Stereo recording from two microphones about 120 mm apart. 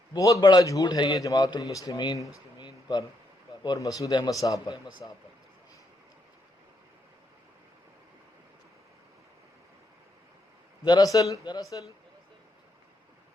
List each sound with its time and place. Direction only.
0.1 s a man's voice: 30° left (ahead or behind)
2.3 s a sound: 35° left (ahead or behind)
3.6 s a man's voice: 30° left (ahead or behind)
10.8 s a man's voice: 35° left (ahead or behind)